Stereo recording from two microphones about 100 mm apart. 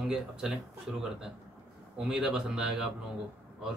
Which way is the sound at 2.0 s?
5° right (ahead or behind).